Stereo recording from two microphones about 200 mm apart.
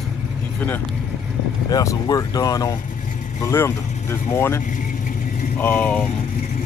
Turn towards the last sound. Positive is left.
turn(degrees=5)  # may be behind; listen again after turning